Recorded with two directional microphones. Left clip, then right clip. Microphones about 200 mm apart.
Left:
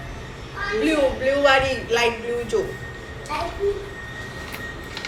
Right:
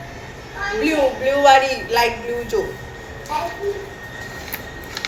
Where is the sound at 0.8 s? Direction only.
20° left (ahead or behind).